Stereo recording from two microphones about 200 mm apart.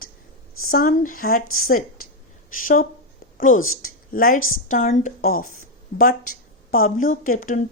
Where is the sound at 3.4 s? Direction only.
40° left (ahead or behind).